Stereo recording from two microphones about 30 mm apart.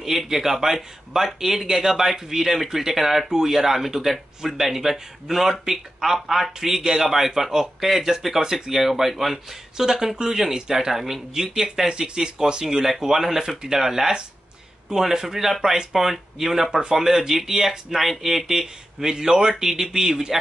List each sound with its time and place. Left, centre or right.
0.0 s speech: centre
8.7 s speech: centre; by 12.6 s right
13.0 s speech: centre
18.5 s speech: centre
19.7 s speech: centre